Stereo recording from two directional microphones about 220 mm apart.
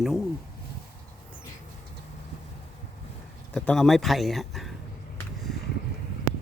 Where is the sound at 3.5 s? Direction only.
5° left (ahead or behind).